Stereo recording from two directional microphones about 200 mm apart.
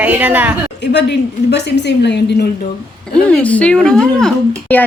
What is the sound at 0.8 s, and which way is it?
A woman's voice, 60° left (ahead or behind).